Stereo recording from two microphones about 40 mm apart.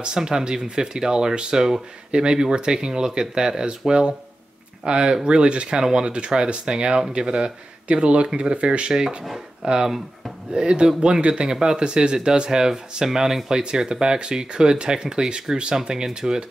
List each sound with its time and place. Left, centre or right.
0.0 s speech: centre
9.2 s speech: centre
9.7 s speech: centre